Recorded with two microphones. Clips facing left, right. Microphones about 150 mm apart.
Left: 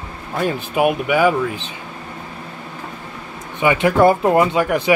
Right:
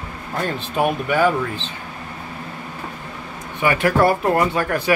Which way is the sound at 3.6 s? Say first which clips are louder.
Left 3 dB; 20° left (ahead or behind).